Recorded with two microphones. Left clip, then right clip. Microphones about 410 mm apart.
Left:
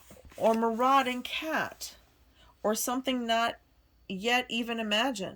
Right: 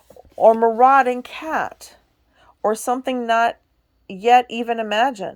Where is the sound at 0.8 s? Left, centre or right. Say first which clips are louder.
Right 12 dB; centre.